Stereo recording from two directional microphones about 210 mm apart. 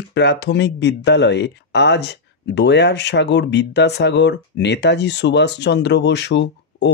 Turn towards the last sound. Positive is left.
turn(degrees=55)  # may be behind; listen again after turning